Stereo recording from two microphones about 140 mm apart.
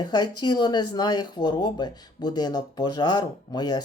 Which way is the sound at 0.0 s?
30° left (ahead or behind).